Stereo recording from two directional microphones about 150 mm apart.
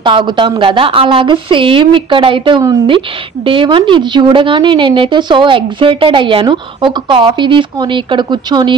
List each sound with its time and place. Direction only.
0.0 s a woman's voice: 30° right (ahead or behind)